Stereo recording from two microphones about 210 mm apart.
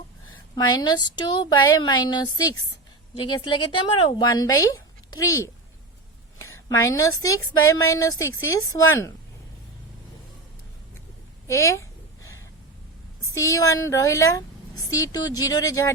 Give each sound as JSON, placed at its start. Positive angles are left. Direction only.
{"t": 0.5, "sound": "a woman's voice", "side_deg": 20}
{"t": 11.4, "sound": "a sound", "side_deg": 15}
{"t": 13.3, "sound": "a woman's voice", "side_deg": 15}